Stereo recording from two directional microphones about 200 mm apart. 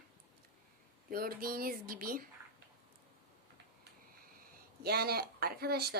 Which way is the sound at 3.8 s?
45° right (ahead or behind).